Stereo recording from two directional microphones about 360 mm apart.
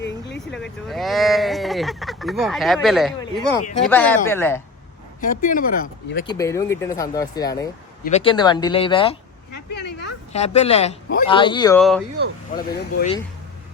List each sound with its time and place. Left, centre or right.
0.5 s speech: centre
5.2 s speech: left
6.2 s speech: centre
9.7 s a sound: left
10.3 s speech: centre
12.6 s speech: left